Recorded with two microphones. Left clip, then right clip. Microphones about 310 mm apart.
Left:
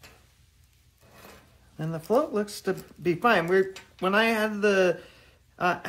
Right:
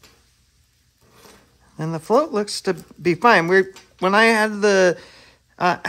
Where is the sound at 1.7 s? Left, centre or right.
Right.